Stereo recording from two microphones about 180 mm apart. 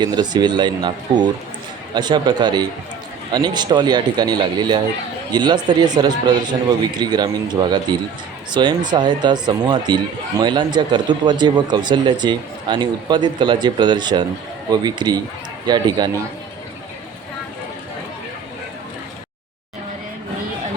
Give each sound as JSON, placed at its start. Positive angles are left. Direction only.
{"t": 0.0, "sound": "speech", "side_deg": -25}